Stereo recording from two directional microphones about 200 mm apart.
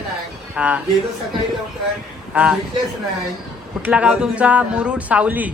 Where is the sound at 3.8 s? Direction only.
5° right (ahead or behind).